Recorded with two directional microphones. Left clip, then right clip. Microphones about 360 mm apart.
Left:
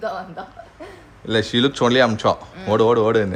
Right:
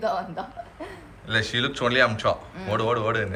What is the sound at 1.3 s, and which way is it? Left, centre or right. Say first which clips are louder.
Speech: left 5 dB; centre.